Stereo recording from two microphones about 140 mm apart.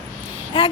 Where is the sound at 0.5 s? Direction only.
35° left (ahead or behind).